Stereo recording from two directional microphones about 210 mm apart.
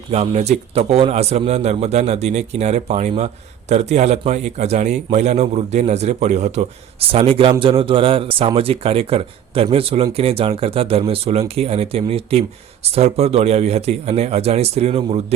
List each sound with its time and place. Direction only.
0.1 s a man's voice: 30° right (ahead or behind)